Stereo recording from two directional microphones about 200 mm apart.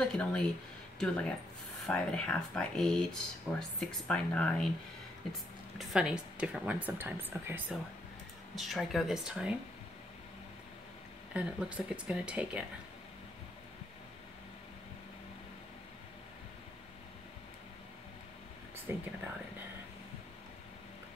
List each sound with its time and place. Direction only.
0.1 s speech: 5° left (ahead or behind)
5.8 s speech: centre (ahead or behind)
11.3 s speech: 5° right (ahead or behind)
18.9 s speech: 10° right (ahead or behind)